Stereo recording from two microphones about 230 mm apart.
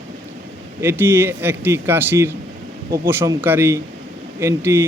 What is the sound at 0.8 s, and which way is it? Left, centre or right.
Speech, centre.